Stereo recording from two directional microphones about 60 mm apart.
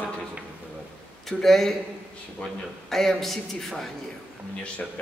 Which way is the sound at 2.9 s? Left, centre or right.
Centre.